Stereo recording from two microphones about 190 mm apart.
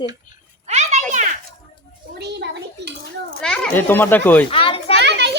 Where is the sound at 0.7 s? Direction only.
35° right (ahead or behind).